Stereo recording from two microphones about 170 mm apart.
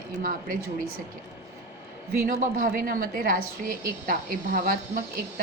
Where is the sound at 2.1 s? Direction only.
60° right (ahead or behind).